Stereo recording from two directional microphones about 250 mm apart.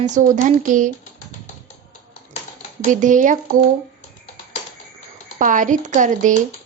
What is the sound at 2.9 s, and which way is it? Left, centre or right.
Speech, right.